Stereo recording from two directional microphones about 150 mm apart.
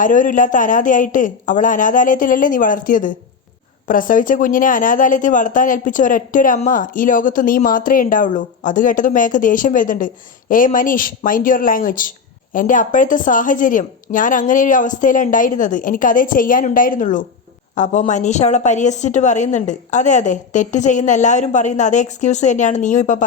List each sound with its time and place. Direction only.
0.0 s a woman's voice: 60° left (ahead or behind)